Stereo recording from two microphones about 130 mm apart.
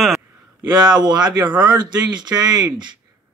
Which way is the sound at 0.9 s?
35° right (ahead or behind).